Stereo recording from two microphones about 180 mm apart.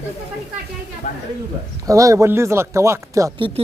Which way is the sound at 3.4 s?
30° right (ahead or behind).